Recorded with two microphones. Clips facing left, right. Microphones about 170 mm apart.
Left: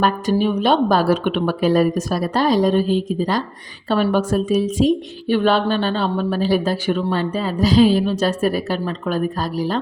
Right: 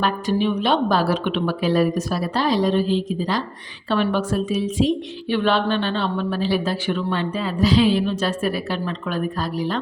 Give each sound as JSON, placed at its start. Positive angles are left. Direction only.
{"t": 0.0, "sound": "a woman's voice", "side_deg": 45}